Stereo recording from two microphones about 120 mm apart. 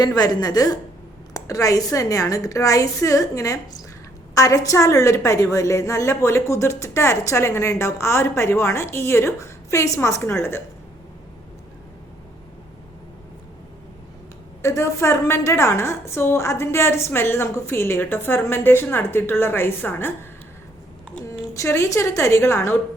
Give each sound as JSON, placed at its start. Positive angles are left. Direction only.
{"t": 0.0, "sound": "a woman's voice", "side_deg": 35}
{"t": 14.6, "sound": "a woman's voice", "side_deg": 25}
{"t": 21.5, "sound": "a woman's voice", "side_deg": 25}